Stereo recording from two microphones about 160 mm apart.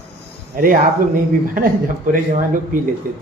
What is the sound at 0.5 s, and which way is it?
Speech, 60° right (ahead or behind).